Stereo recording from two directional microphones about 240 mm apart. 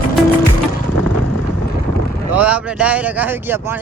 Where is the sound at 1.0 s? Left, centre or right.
Right.